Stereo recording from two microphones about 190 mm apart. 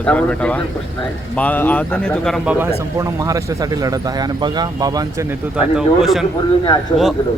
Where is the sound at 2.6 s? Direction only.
15° right (ahead or behind).